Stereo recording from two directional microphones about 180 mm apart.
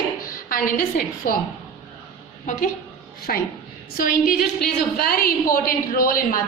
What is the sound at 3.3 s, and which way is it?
A woman's voice, 55° left (ahead or behind).